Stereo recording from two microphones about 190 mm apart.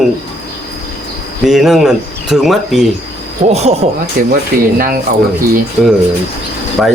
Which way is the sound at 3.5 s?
35° right (ahead or behind).